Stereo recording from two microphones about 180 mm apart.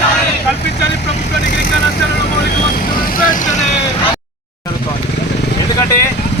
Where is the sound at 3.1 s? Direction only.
50° left (ahead or behind).